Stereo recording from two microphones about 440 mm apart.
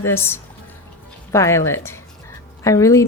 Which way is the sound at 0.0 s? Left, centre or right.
Centre.